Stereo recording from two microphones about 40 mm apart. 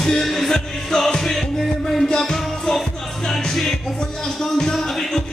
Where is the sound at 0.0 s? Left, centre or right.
Centre.